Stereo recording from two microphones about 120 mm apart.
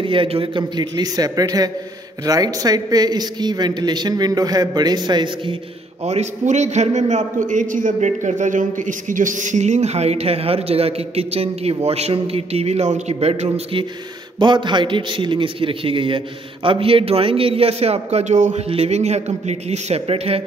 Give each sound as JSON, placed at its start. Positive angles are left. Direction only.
{"t": 0.0, "sound": "a woman's voice", "side_deg": -45}
{"t": 6.0, "sound": "a man's voice", "side_deg": -70}
{"t": 13.1, "sound": "a man's voice", "side_deg": -60}
{"t": 14.4, "sound": "a man's voice", "side_deg": -40}
{"t": 18.7, "sound": "a man's voice", "side_deg": -60}